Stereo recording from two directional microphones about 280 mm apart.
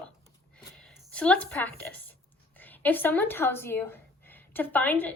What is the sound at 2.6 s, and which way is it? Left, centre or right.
Speech, centre.